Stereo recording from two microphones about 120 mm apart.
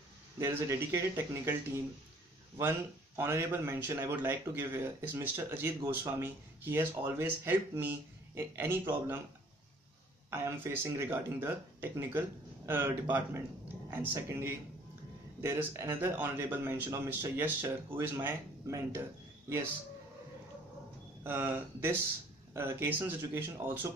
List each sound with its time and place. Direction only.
0.4 s a man's voice: 20° right (ahead or behind)
10.3 s a man's voice: 20° right (ahead or behind)
21.2 s a man's voice: 20° right (ahead or behind)